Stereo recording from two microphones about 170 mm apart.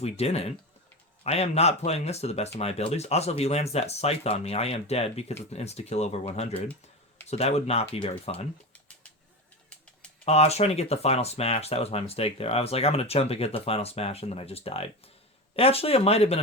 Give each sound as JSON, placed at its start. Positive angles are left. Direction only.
{"t": 0.0, "sound": "speech", "side_deg": 35}
{"t": 10.2, "sound": "speech", "side_deg": 40}